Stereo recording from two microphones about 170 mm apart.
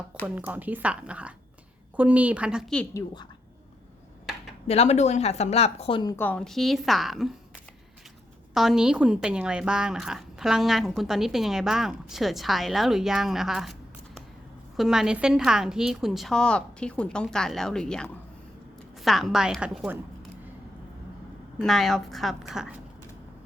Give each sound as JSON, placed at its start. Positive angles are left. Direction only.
{"t": 0.3, "sound": "speech", "side_deg": -10}
{"t": 4.7, "sound": "speech", "side_deg": 40}
{"t": 6.1, "sound": "speech", "side_deg": 10}
{"t": 8.5, "sound": "speech", "side_deg": -5}
{"t": 14.8, "sound": "speech", "side_deg": -5}
{"t": 21.6, "sound": "speech", "side_deg": 0}